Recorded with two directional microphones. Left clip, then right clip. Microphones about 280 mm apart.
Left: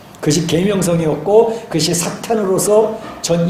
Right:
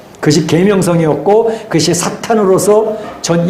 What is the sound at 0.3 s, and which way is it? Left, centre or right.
Speech, right.